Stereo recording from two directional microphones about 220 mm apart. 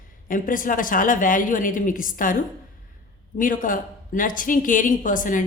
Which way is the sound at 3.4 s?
40° left (ahead or behind).